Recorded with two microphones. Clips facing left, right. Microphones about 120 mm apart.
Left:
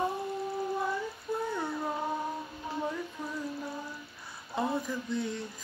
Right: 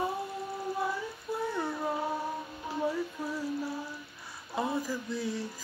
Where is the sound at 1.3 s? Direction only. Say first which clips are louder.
Left 1 dB; 5° right (ahead or behind).